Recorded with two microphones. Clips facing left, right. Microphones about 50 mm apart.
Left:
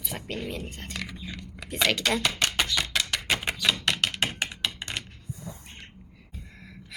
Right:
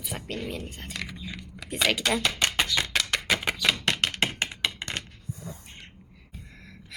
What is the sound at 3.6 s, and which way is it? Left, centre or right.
Typewriter, right.